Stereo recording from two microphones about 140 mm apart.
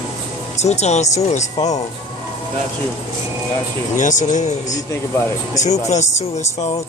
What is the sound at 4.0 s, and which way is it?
Speech, 65° left (ahead or behind).